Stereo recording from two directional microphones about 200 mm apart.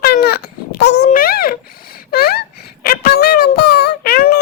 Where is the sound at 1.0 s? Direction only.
45° left (ahead or behind).